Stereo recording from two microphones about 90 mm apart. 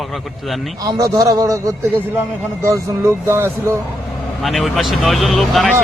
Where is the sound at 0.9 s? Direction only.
40° right (ahead or behind).